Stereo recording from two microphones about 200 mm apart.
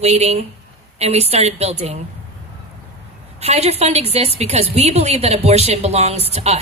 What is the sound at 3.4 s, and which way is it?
Speech, 30° right (ahead or behind).